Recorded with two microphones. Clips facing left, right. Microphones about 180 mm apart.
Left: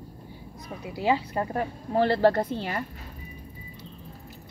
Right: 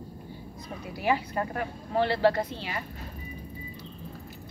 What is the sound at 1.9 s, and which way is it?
Speech, 45° left (ahead or behind).